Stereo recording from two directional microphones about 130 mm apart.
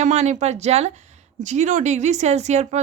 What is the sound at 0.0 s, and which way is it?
Speech, 65° right (ahead or behind).